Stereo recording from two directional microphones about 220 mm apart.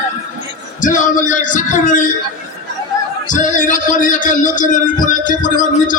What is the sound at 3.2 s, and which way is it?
A man's voice, 35° left (ahead or behind).